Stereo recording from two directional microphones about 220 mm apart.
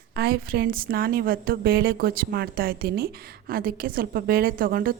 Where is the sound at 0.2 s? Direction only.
45° right (ahead or behind).